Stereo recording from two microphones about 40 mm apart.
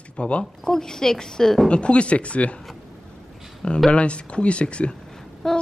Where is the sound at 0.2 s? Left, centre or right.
Left.